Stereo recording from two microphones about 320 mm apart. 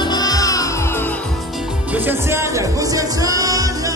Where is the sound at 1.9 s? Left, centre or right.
Centre.